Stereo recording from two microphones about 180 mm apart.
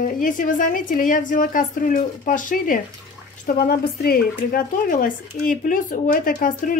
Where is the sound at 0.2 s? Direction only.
50° left (ahead or behind).